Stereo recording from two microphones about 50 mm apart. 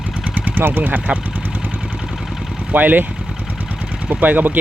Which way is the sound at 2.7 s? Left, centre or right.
Right.